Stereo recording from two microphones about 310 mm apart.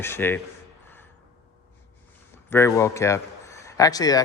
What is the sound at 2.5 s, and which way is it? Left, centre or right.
A man's voice, centre.